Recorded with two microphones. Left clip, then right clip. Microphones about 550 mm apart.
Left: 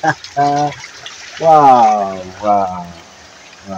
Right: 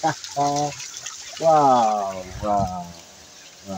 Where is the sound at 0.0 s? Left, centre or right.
Right.